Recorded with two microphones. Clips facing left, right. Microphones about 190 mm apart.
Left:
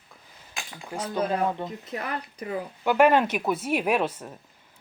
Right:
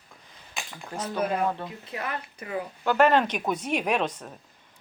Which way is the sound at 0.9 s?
10° left (ahead or behind).